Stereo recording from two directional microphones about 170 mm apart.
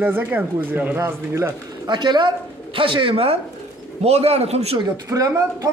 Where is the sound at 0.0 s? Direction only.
10° right (ahead or behind); by 4.7 s 40° right (ahead or behind).